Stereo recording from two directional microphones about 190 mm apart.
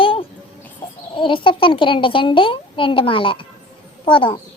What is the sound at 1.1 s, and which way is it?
A child's voice, 25° left (ahead or behind).